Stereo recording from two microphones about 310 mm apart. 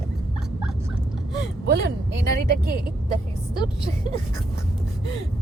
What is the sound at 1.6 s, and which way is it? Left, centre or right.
Speech, right.